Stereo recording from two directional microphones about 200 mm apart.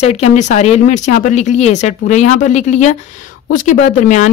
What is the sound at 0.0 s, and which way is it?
A woman's voice, 35° left (ahead or behind).